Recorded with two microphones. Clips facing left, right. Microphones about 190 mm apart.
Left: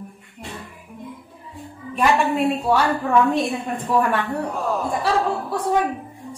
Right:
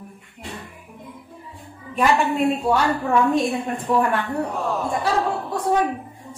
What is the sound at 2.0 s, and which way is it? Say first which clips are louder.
Speech: even; centre (ahead or behind).